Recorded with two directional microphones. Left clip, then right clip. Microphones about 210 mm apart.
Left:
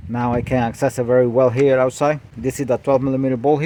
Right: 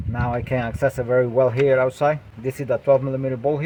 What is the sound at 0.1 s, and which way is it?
Speech, 55° left (ahead or behind).